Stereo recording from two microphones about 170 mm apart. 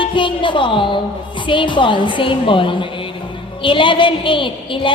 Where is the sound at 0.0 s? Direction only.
30° left (ahead or behind).